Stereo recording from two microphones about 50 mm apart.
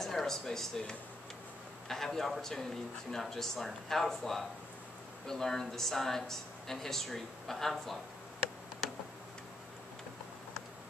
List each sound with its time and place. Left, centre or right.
0.0 s speech: centre